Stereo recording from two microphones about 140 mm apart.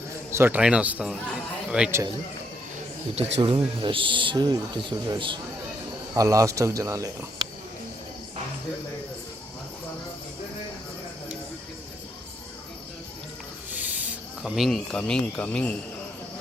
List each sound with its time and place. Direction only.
0.3 s a man's voice: 15° right (ahead or behind)
3.2 s speech: 40° right (ahead or behind)
6.1 s speech: 20° right (ahead or behind)
13.7 s speech: 10° right (ahead or behind); by 15.8 s 10° left (ahead or behind)